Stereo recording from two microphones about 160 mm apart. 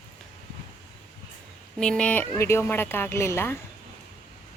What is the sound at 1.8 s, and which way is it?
A woman's voice, 5° left (ahead or behind).